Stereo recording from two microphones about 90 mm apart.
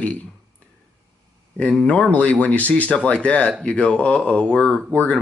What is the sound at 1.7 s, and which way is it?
Speech, 10° left (ahead or behind).